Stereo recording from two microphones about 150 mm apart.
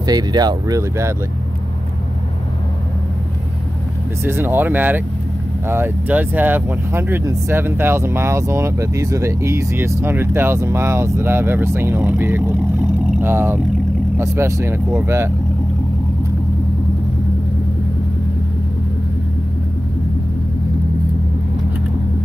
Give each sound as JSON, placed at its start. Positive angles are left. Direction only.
{"t": 0.0, "sound": "speech", "side_deg": -25}
{"t": 4.2, "sound": "speech", "side_deg": -15}